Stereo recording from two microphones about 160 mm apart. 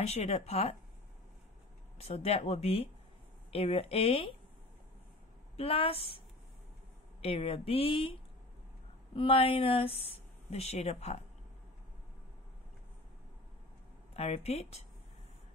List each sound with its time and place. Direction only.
0.0 s speech: 40° left (ahead or behind)
2.0 s speech: 40° left (ahead or behind)
5.6 s speech: 35° left (ahead or behind)
7.2 s speech: 40° left (ahead or behind)
14.1 s speech: 40° left (ahead or behind)